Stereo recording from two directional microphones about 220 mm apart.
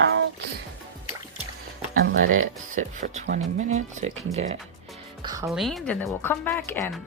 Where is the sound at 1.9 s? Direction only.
45° right (ahead or behind).